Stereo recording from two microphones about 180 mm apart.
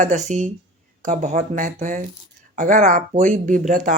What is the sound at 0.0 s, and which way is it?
Speech, 40° right (ahead or behind).